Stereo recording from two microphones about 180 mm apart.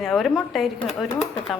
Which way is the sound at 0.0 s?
Centre (ahead or behind).